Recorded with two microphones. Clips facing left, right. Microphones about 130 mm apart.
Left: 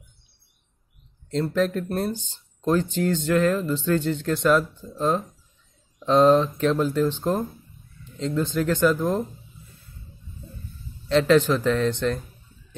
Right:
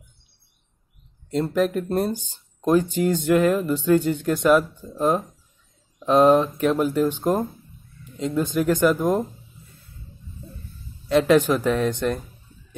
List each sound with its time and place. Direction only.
1.5 s speech: 10° right (ahead or behind)
11.1 s speech: 10° right (ahead or behind)